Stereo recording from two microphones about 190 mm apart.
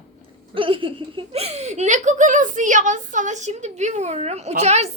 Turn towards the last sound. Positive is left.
turn(degrees=-35)  # may be behind; listen again after turning